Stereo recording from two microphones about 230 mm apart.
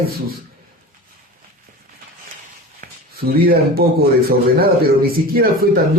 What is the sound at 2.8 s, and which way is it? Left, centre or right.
Speech, right.